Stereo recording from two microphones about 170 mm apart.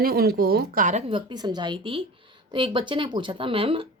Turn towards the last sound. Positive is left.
turn(degrees=-35)  # may be behind; listen again after turning